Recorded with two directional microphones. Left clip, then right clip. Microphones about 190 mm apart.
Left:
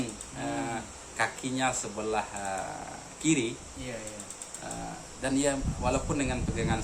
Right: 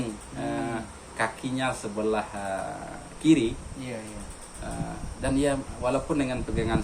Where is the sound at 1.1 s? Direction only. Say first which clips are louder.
Right 2 dB; 30° left (ahead or behind).